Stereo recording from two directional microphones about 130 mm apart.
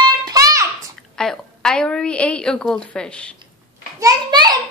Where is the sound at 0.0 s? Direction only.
30° right (ahead or behind).